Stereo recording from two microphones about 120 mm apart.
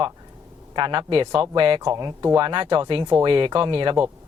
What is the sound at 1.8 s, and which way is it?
Speech, 30° right (ahead or behind).